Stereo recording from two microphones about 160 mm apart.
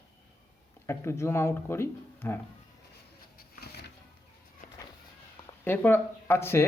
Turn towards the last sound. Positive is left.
turn(degrees=15)  # may be behind; listen again after turning